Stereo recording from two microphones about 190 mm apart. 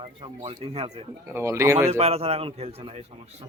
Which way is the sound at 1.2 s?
15° right (ahead or behind).